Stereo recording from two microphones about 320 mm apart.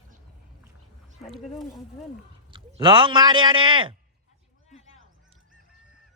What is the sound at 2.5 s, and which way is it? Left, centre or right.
Speech, centre.